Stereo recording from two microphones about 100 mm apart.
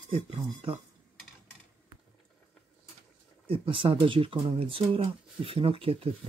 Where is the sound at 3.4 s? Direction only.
65° right (ahead or behind).